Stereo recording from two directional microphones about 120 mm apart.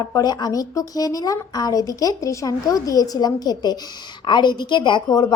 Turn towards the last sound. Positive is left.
turn(degrees=35)  # may be behind; listen again after turning